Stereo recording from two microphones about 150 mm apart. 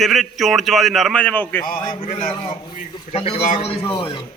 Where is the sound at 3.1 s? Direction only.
45° left (ahead or behind).